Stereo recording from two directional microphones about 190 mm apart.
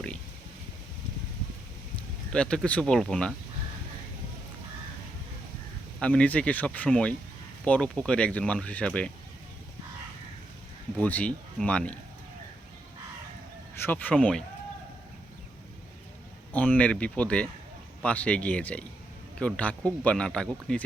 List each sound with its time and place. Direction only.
2.0 s speech: 5° left (ahead or behind)
6.0 s speech: 5° left (ahead or behind)
11.0 s speech: 5° left (ahead or behind)
13.8 s speech: 10° left (ahead or behind)
16.5 s speech: 10° left (ahead or behind)